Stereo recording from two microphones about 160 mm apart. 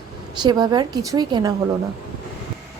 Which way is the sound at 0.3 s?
25° right (ahead or behind).